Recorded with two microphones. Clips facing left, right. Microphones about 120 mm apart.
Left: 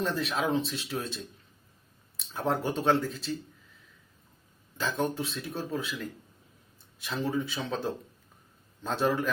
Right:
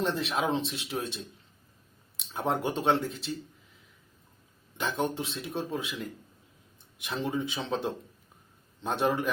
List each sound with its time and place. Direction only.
0.0 s speech: 25° right (ahead or behind)
4.8 s speech: 25° right (ahead or behind)